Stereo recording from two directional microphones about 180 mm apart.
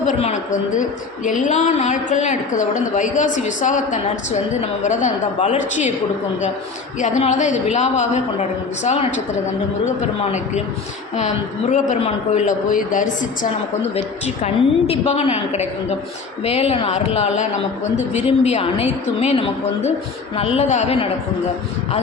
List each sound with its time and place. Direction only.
0.0 s a woman's voice: 40° left (ahead or behind)
7.0 s a woman's voice: 40° left (ahead or behind)
11.7 s a woman's voice: 40° left (ahead or behind)
14.4 s a woman's voice: 35° left (ahead or behind)